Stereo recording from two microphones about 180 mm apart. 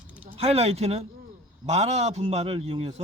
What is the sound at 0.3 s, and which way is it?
Speech, 35° right (ahead or behind).